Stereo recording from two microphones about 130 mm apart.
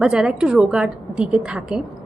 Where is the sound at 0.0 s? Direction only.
5° right (ahead or behind).